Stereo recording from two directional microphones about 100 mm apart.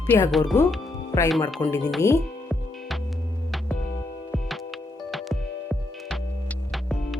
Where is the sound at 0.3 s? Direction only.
Centre (ahead or behind).